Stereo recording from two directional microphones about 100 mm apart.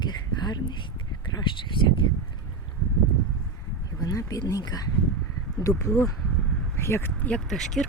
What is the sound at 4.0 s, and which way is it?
Speech, 35° left (ahead or behind).